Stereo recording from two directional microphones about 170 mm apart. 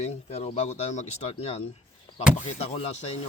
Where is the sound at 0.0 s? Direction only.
40° left (ahead or behind).